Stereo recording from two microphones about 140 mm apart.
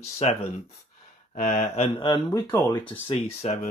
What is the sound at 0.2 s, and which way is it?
Speech, 50° left (ahead or behind).